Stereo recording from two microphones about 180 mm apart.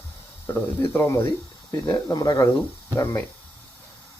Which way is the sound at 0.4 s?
10° left (ahead or behind).